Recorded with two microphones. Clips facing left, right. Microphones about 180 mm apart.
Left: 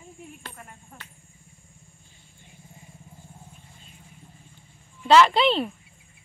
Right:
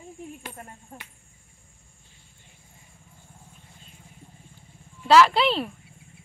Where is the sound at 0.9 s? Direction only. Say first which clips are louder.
Right 6 dB; 35° right (ahead or behind).